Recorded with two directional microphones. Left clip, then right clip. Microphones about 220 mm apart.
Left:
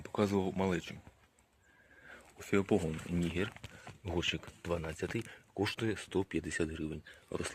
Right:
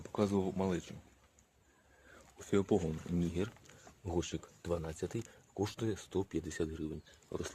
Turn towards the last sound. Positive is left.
turn(degrees=20)  # may be behind; listen again after turning